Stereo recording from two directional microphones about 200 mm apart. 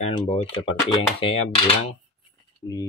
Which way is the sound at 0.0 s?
30° left (ahead or behind).